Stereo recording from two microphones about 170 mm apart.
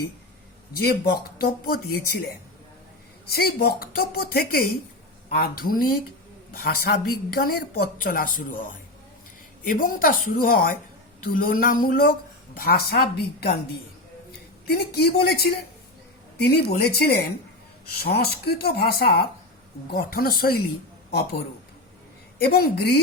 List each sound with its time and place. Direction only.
0.8 s a woman's voice: 65° left (ahead or behind)
3.2 s a woman's voice: 65° left (ahead or behind)
9.6 s a woman's voice: 55° left (ahead or behind); by 13.5 s 70° left (ahead or behind)
14.7 s a woman's voice: 70° left (ahead or behind)
22.4 s speech: 65° left (ahead or behind)